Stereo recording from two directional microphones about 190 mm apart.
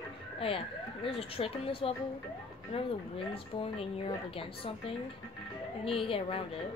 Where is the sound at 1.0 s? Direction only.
30° left (ahead or behind).